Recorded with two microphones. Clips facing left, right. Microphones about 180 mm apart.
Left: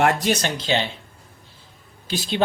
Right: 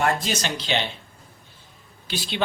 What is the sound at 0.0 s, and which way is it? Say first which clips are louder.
Speech: left 4 dB; 70° left (ahead or behind).